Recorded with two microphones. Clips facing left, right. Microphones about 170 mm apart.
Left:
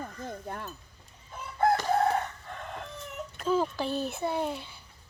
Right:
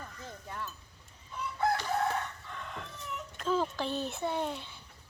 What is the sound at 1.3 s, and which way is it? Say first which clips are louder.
Chicken: left 5 dB; 50° left (ahead or behind).